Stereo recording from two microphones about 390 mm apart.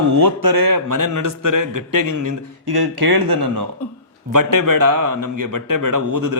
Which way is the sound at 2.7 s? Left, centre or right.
Right.